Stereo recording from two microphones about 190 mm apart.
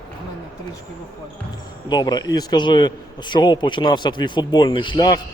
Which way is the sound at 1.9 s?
20° left (ahead or behind).